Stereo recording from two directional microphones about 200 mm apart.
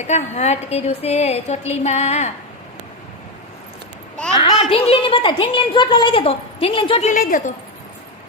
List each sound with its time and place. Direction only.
0.0 s a woman's voice: 35° left (ahead or behind)
4.5 s a woman's voice: 30° left (ahead or behind)
7.1 s a woman's voice: 40° left (ahead or behind)